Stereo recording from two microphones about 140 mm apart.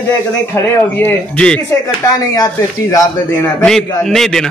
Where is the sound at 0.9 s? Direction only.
15° left (ahead or behind).